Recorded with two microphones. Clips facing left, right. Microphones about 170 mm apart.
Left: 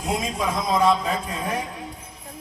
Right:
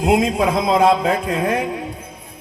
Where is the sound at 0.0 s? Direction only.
65° right (ahead or behind).